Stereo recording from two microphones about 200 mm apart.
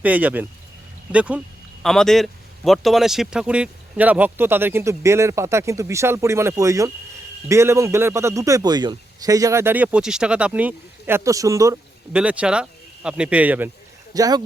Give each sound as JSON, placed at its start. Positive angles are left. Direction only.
{"t": 0.0, "sound": "a man's voice", "side_deg": -10}
{"t": 14.1, "sound": "speech", "side_deg": -20}